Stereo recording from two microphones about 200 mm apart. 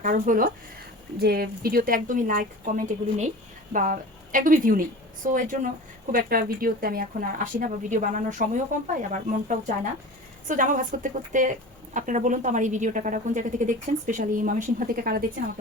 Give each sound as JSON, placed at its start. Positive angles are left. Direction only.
{"t": 0.0, "sound": "a woman's voice", "side_deg": -45}